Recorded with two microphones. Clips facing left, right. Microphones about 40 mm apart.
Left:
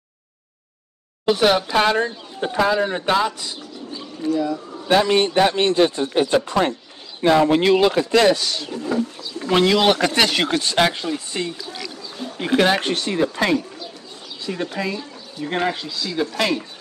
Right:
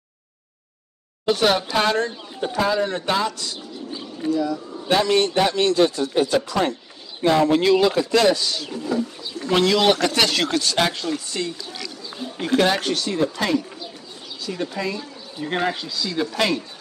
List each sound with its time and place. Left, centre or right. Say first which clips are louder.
1.2 s speech: left 2 dB; centre
4.9 s a man's voice: left 2 dB; left
15.3 s speech: left 1 dB; centre